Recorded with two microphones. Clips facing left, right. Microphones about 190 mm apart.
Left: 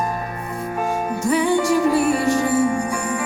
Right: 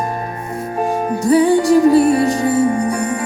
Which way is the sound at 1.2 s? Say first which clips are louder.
Right 7 dB; 35° right (ahead or behind).